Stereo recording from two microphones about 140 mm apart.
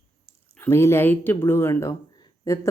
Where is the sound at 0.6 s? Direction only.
20° left (ahead or behind).